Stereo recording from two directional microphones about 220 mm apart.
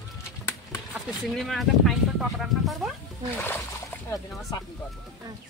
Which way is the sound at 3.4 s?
10° left (ahead or behind).